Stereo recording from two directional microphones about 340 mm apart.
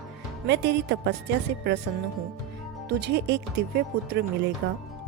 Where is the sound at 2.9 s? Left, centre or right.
Right.